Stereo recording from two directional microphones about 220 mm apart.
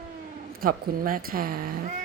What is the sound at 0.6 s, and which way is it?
Speech, 40° right (ahead or behind).